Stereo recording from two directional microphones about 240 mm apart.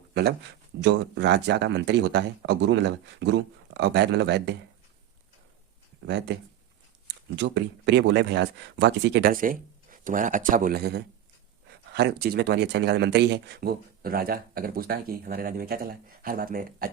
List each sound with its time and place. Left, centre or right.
0.1 s speech: right
6.1 s speech: right
7.3 s speech: right